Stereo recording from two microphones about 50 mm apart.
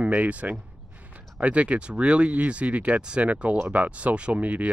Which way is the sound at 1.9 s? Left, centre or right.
Right.